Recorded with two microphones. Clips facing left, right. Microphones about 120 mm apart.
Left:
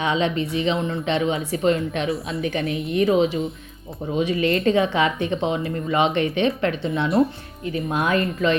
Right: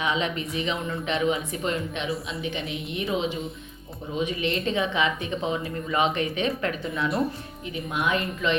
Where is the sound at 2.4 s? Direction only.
45° left (ahead or behind).